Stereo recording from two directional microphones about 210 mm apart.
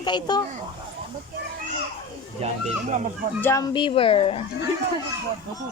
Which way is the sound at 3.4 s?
15° left (ahead or behind).